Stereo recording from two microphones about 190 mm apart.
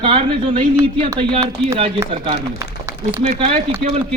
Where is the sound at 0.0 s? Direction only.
25° right (ahead or behind).